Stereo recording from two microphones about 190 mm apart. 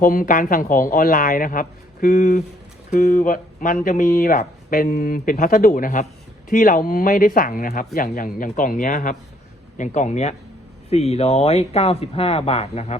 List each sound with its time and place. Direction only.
0.0 s speech: 45° left (ahead or behind)